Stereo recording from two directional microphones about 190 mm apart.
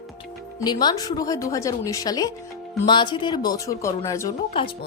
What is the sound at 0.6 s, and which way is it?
Speech, 20° left (ahead or behind).